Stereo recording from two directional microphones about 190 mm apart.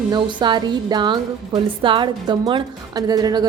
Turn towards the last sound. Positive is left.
turn(degrees=-20)  # may be behind; listen again after turning